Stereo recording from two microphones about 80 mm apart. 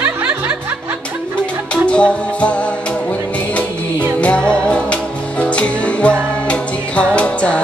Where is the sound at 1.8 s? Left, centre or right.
Centre.